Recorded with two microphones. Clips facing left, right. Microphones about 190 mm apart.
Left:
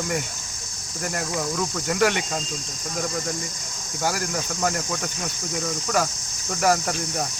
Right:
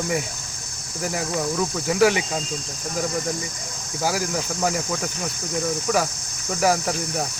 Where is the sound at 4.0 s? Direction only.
Centre (ahead or behind).